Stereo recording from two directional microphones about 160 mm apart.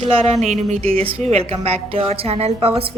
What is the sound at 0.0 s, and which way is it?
A woman's voice, 45° right (ahead or behind).